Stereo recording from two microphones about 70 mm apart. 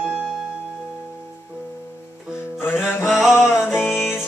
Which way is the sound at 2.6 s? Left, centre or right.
Left.